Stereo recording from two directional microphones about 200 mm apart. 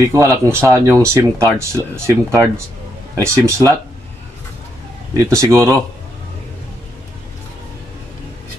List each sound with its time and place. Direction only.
0.1 s speech: 15° right (ahead or behind)
5.1 s speech: 15° right (ahead or behind)